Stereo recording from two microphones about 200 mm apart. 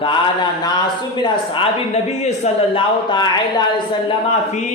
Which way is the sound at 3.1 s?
20° left (ahead or behind).